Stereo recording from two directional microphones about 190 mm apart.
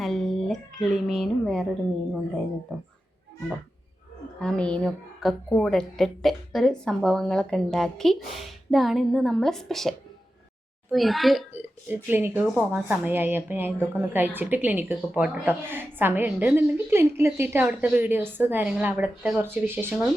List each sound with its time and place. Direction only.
0.0 s a sound: centre (ahead or behind)
0.9 s a woman's voice: centre (ahead or behind)
4.4 s a woman's voice: 5° left (ahead or behind)
10.9 s a woman's voice: centre (ahead or behind)